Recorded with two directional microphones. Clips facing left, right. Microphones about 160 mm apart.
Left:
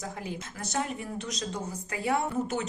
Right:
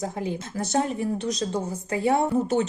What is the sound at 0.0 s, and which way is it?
A woman's voice, 30° right (ahead or behind).